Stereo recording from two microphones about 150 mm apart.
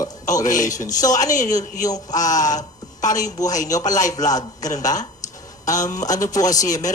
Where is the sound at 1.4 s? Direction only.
25° left (ahead or behind).